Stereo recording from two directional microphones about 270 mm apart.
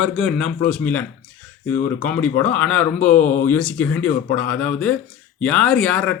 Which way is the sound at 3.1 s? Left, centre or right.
Left.